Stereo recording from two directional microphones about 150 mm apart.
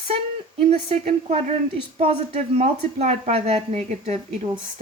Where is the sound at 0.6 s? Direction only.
45° right (ahead or behind).